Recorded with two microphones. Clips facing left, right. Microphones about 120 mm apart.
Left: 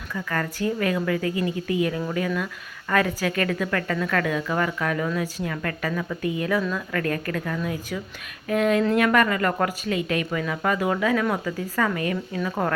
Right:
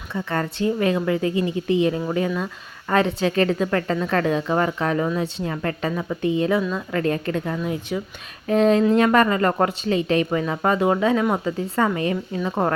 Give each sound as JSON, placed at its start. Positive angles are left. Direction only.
{"t": 0.1, "sound": "a woman's voice", "side_deg": -25}